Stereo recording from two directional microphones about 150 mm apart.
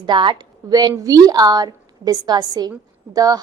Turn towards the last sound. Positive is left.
turn(degrees=-25)  # may be behind; listen again after turning